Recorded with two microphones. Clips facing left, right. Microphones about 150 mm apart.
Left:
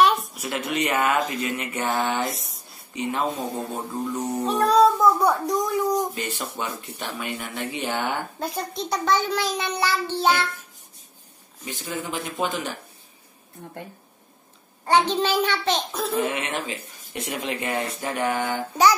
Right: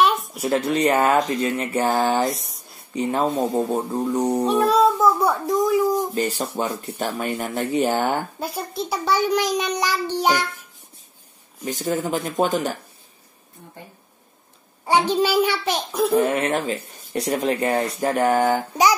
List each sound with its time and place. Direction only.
0.0 s a sound: centre (ahead or behind)
0.4 s speech: 30° right (ahead or behind)
2.2 s speech: centre (ahead or behind)
2.9 s speech: 35° right (ahead or behind)
4.5 s a child's voice: centre (ahead or behind)
6.1 s speech: 35° right (ahead or behind)
8.4 s a child's voice: 5° right (ahead or behind)
11.6 s speech: 40° right (ahead or behind)
14.9 s a child's voice: 10° right (ahead or behind)
16.2 s speech: 40° right (ahead or behind)